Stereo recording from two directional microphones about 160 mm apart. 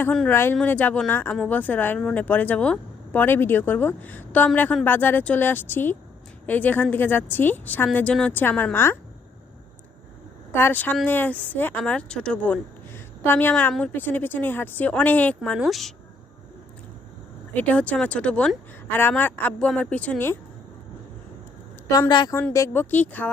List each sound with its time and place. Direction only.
0.0 s speech: 10° left (ahead or behind)
10.5 s speech: 15° left (ahead or behind)
15.4 s speech: centre (ahead or behind)
17.5 s speech: 10° left (ahead or behind)
21.8 s a woman's voice: 20° left (ahead or behind)